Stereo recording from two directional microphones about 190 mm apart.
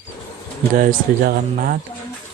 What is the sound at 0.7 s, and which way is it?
Speech, 50° right (ahead or behind).